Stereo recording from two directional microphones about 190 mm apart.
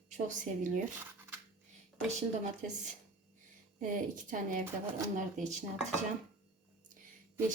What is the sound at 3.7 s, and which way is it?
A woman's voice, 45° right (ahead or behind).